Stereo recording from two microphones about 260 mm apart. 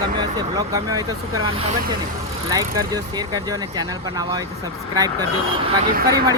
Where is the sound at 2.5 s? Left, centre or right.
Centre.